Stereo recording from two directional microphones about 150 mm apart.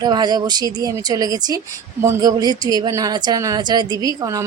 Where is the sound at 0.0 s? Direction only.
30° right (ahead or behind).